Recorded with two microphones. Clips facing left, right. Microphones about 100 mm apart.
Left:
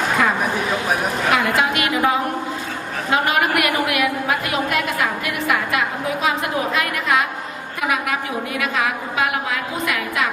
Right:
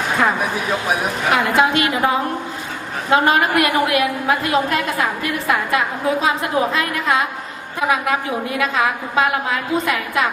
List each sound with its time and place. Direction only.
1.3 s a woman's voice: 30° right (ahead or behind)